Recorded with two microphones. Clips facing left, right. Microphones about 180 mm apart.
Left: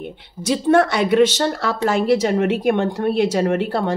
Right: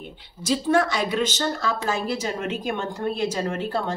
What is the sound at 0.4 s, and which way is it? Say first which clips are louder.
A woman's voice: left 5 dB; 60° left (ahead or behind).